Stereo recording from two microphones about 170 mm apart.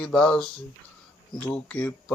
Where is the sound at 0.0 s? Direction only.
5° left (ahead or behind).